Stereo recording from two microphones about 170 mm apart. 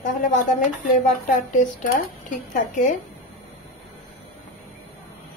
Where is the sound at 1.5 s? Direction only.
50° left (ahead or behind).